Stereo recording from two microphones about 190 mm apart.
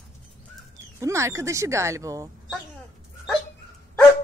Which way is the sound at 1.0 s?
15° right (ahead or behind).